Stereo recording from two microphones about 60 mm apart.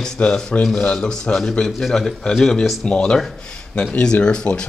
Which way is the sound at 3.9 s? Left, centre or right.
Centre.